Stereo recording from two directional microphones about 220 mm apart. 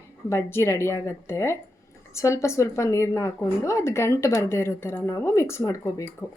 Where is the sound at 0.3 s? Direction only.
10° left (ahead or behind).